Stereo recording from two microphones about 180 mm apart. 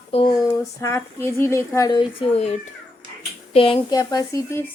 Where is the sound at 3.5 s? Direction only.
30° left (ahead or behind).